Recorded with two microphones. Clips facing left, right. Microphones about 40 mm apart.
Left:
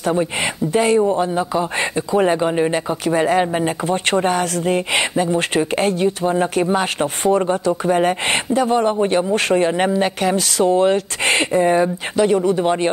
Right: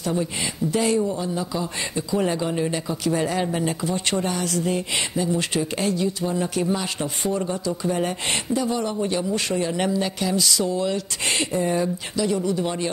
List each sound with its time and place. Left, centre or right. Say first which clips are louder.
0.0 s speech: left 6 dB; left